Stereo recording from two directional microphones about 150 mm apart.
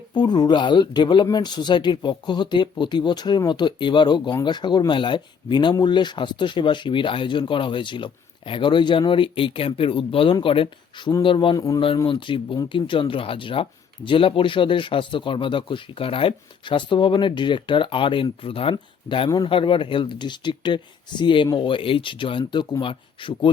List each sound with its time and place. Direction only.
0.1 s speech: 30° left (ahead or behind)
11.5 s speech: 20° left (ahead or behind)
12.0 s speech: 35° left (ahead or behind)